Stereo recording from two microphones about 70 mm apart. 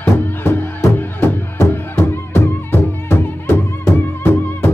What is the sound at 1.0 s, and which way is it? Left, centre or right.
Music, left.